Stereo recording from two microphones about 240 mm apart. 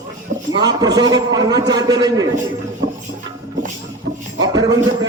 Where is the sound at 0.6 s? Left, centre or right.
Centre.